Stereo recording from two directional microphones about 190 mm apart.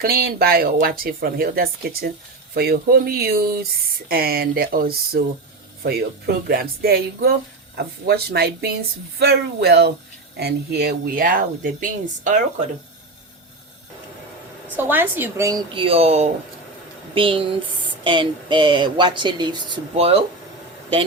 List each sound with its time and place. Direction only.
0.0 s speech: 55° right (ahead or behind)
6.5 s speech: 55° right (ahead or behind)
14.7 s speech: 10° right (ahead or behind); by 20.2 s 30° right (ahead or behind)